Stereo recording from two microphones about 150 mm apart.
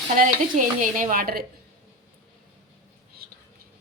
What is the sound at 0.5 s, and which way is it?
Speech, 60° right (ahead or behind).